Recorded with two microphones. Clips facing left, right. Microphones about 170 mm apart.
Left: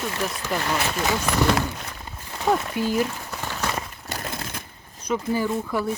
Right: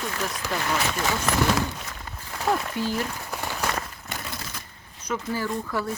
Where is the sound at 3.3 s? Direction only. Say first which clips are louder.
Even; 10° right (ahead or behind).